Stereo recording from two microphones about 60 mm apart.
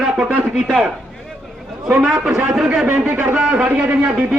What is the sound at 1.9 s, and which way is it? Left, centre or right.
A man's voice, centre.